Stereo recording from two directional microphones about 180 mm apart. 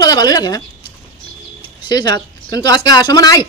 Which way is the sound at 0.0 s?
20° left (ahead or behind).